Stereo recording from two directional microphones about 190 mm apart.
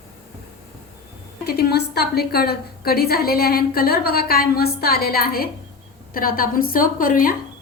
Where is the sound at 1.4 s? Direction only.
55° left (ahead or behind).